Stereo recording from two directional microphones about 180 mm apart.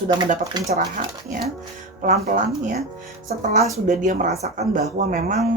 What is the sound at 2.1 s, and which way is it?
Speech, 55° right (ahead or behind).